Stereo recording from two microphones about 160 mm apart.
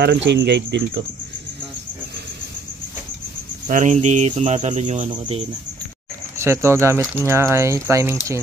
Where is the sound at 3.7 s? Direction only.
50° right (ahead or behind).